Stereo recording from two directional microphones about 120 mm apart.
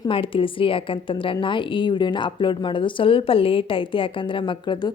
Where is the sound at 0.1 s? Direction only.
50° left (ahead or behind).